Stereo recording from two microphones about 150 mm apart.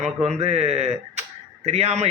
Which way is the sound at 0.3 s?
45° right (ahead or behind).